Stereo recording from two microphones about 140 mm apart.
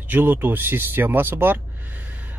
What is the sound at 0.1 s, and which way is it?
Speech, 15° right (ahead or behind).